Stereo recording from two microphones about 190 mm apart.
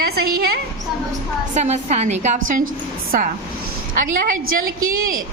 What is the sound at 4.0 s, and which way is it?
Speech, 45° right (ahead or behind).